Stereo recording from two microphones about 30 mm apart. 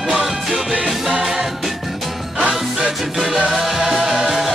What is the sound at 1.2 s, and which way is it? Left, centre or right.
Music, right.